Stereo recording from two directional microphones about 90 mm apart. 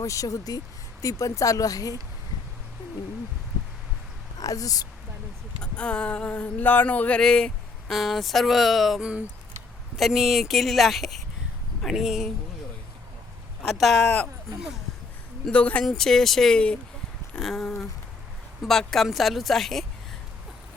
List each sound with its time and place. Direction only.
0.0 s speech: 35° left (ahead or behind)
4.4 s speech: 40° left (ahead or behind)
5.7 s a sound: 15° left (ahead or behind)
7.2 s speech: 10° left (ahead or behind)
13.7 s speech: centre (ahead or behind)
15.4 s speech: 15° left (ahead or behind)